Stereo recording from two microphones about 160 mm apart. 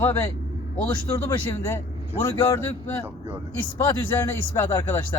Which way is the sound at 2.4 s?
15° left (ahead or behind).